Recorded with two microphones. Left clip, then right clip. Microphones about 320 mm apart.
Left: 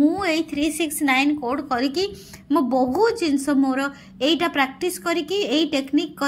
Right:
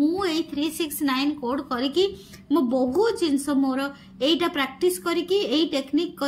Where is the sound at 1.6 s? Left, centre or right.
Centre.